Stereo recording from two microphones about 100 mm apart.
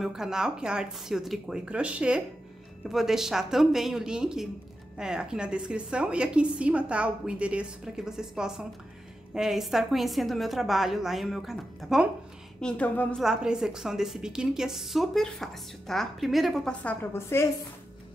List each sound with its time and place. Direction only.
0.0 s a woman's voice: 5° right (ahead or behind)
12.5 s a woman's voice: 10° left (ahead or behind)
13.2 s a woman's voice: 5° right (ahead or behind)
16.8 s a woman's voice: 20° left (ahead or behind)